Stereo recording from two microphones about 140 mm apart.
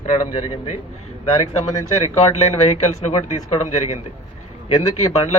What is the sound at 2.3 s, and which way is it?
Speech, 50° left (ahead or behind).